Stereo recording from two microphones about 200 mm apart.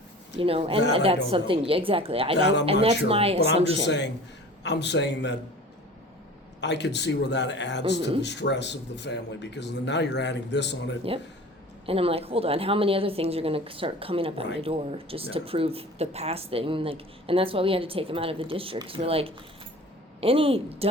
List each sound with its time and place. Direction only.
0.3 s a woman's voice: 30° right (ahead or behind)
2.4 s speech: 60° left (ahead or behind)
3.1 s a woman's voice: 30° right (ahead or behind)
3.8 s speech: 60° left (ahead or behind)
6.6 s speech: 60° left (ahead or behind)
11.9 s a woman's voice: 30° right (ahead or behind)